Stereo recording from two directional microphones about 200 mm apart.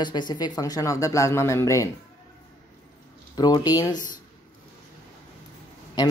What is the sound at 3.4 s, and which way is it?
Speech, 20° left (ahead or behind).